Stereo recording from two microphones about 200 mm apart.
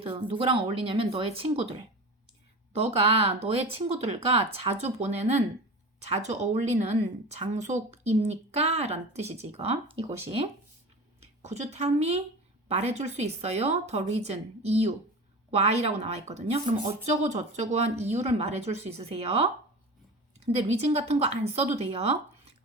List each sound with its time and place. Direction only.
0.0 s speech: 30° right (ahead or behind)
20.6 s speech: 30° right (ahead or behind)